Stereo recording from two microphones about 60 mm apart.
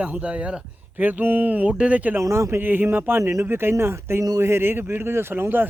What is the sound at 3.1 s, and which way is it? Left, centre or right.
Speech, right.